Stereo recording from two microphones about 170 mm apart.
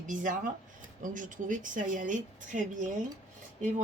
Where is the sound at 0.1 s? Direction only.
50° right (ahead or behind).